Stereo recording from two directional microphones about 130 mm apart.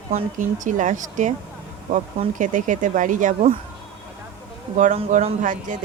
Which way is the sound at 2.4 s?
85° right.